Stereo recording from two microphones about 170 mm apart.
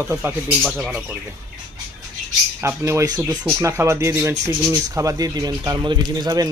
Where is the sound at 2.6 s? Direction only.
15° right (ahead or behind).